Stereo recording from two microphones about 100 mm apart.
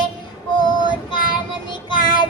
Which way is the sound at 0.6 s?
50° left (ahead or behind).